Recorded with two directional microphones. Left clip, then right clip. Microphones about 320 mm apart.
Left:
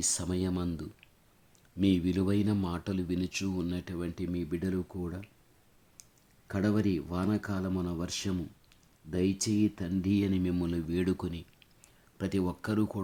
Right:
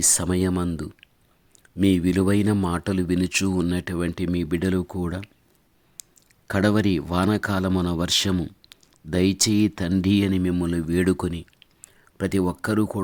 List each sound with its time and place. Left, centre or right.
0.0 s speech: right
6.0 s a sound: right
6.5 s speech: right